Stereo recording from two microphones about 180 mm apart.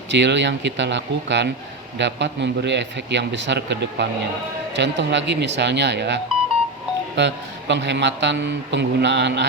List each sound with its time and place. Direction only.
0.1 s a man's voice: 75° right (ahead or behind)
7.2 s a man's voice: 80° right